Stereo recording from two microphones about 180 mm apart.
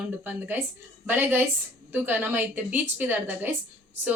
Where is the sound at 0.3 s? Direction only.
10° right (ahead or behind).